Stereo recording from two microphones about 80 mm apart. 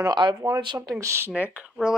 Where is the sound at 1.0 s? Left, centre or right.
Right.